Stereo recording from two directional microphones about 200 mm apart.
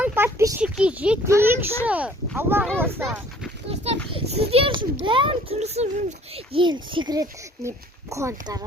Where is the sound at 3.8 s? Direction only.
30° right (ahead or behind).